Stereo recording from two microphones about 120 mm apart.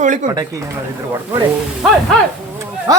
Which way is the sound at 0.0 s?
90° right.